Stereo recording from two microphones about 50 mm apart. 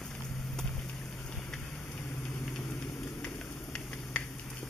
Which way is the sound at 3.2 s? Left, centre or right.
Left.